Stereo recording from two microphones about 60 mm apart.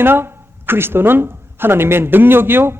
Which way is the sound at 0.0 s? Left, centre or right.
Right.